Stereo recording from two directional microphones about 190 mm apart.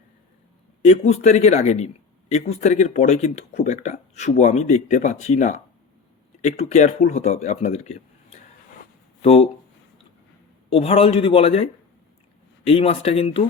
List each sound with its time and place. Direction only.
0.9 s speech: 35° left (ahead or behind)
10.7 s a man's voice: 30° left (ahead or behind)